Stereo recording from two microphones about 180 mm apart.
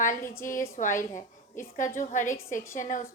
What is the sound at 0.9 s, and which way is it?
Speech, 15° left (ahead or behind).